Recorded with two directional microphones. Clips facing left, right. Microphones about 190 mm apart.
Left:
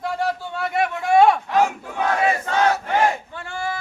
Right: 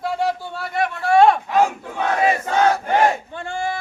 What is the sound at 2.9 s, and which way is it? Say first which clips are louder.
Battle cry: right 2 dB; 25° right (ahead or behind).